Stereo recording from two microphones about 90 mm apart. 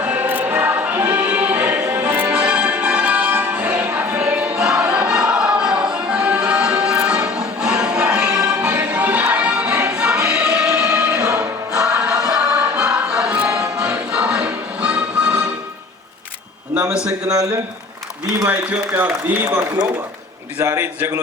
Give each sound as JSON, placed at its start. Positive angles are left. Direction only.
{"t": 0.0, "sound": "music", "side_deg": -15}
{"t": 3.9, "sound": "choir", "side_deg": -15}
{"t": 18.4, "sound": "a man's voice", "side_deg": -20}
{"t": 20.6, "sound": "a man's voice", "side_deg": -35}